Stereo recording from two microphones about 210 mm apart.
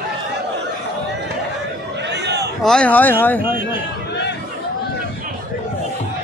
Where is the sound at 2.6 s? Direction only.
5° left (ahead or behind).